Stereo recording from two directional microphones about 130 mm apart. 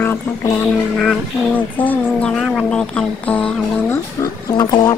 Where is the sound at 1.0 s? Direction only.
10° left (ahead or behind).